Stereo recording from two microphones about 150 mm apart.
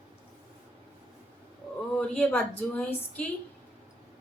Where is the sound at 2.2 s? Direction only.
10° left (ahead or behind).